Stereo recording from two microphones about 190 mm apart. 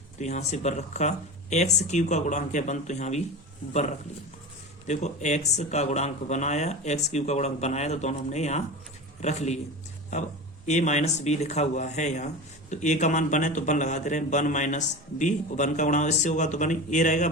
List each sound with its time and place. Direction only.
0.2 s a man's voice: 35° left (ahead or behind)
10.7 s a man's voice: 40° left (ahead or behind)